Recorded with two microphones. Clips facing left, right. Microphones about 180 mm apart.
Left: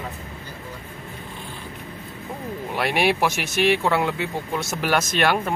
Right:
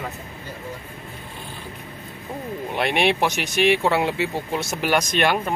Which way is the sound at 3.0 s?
20° right (ahead or behind).